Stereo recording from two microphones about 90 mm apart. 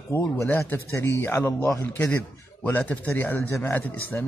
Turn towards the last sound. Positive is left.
turn(degrees=20)  # may be behind; listen again after turning